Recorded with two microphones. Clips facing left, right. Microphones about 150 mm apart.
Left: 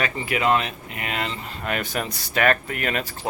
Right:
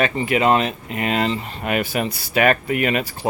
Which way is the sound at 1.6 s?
10° right (ahead or behind).